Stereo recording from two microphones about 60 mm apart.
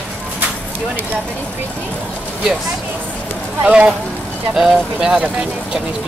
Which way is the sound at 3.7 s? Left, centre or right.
Centre.